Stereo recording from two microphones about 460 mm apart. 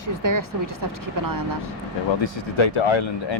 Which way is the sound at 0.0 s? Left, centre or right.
Right.